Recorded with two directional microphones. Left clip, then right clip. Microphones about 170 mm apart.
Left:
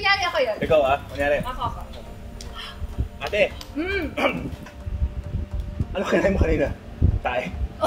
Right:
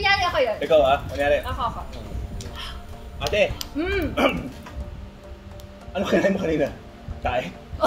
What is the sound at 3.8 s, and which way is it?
Speech, 15° right (ahead or behind).